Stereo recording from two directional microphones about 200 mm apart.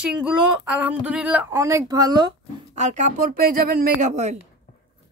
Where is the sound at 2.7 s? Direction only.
35° right (ahead or behind).